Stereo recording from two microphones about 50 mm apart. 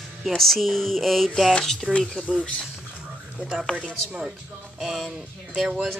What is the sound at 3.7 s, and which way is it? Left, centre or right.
Speech, right.